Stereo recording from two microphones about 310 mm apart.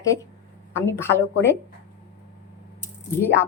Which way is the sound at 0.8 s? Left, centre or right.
Centre.